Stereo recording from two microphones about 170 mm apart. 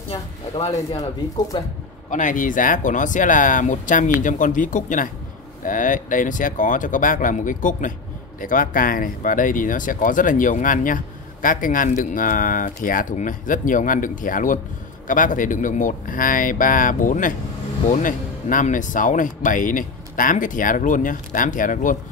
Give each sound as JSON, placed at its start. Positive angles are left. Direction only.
{"t": 0.1, "sound": "speech", "side_deg": 40}
{"t": 1.5, "sound": "speech", "side_deg": 25}
{"t": 2.0, "sound": "speech", "side_deg": 50}